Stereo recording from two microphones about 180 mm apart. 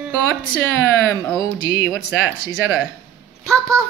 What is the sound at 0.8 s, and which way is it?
A woman's voice, 15° left (ahead or behind).